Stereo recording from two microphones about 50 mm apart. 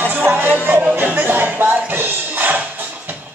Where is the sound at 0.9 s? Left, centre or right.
Right.